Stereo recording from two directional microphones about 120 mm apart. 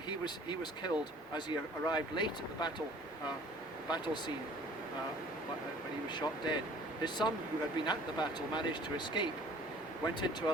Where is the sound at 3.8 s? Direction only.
35° left (ahead or behind).